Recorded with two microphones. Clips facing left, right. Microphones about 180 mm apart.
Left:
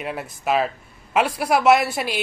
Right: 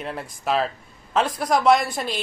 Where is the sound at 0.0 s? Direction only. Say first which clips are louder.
Left 2 dB; 5° left (ahead or behind).